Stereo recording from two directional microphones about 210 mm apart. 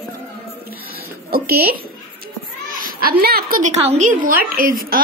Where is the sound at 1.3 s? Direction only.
50° right (ahead or behind).